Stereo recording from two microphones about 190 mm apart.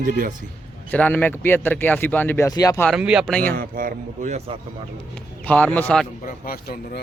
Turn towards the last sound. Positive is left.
turn(degrees=55)  # may be behind; listen again after turning